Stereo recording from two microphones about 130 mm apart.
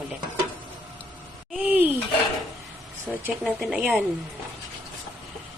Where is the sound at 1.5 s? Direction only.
10° right (ahead or behind).